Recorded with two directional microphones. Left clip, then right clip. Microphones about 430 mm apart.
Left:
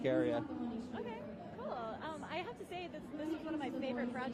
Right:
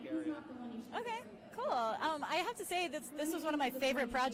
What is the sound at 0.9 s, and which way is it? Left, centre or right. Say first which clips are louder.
A woman's voice: right 3 dB; right.